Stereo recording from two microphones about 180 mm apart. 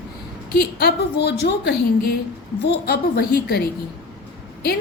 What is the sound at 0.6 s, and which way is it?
A woman's voice, 65° left (ahead or behind).